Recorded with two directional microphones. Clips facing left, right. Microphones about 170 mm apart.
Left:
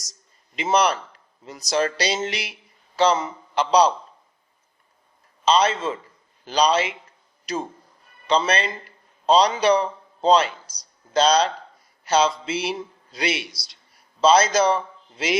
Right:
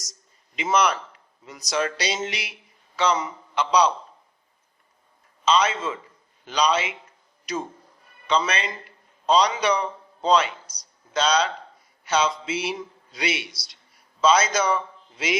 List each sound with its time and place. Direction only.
0.5 s a man's voice: 35° left (ahead or behind)
5.5 s speech: 35° left (ahead or behind)
8.3 s a man's voice: 35° left (ahead or behind)